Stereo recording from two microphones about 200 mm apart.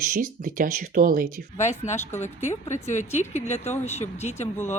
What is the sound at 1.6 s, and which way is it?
A woman's voice, 35° left (ahead or behind).